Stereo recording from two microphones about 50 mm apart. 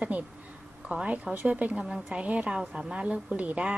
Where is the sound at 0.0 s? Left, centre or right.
Right.